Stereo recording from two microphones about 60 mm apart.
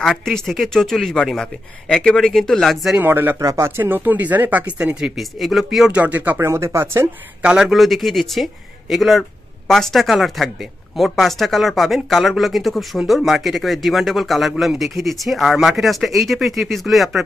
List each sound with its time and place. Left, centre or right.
0.2 s speech: centre
3.0 s speech: right
3.3 s speech: right
5.1 s speech: centre
5.9 s speech: right
6.4 s speech: right
7.4 s a man's voice: centre
7.7 s speech: centre